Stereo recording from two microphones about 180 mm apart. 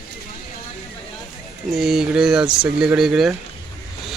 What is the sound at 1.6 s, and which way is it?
Speech, centre (ahead or behind).